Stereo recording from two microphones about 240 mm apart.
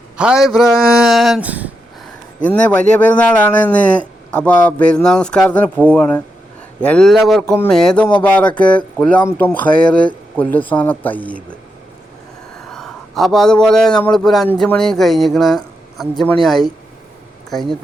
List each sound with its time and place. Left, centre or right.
0.2 s a man's voice: centre
2.5 s a man's voice: centre
12.7 s a man's voice: centre